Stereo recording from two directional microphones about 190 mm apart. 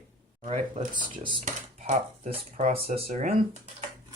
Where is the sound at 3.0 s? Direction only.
45° right (ahead or behind).